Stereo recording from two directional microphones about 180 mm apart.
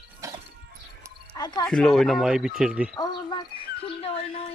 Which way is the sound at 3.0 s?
25° left (ahead or behind).